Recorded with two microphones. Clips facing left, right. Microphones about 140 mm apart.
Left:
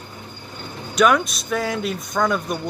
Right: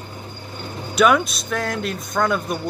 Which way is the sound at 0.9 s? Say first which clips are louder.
Right 1 dB; centre (ahead or behind).